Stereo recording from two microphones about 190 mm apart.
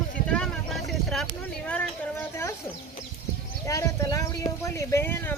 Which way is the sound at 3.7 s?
15° left (ahead or behind).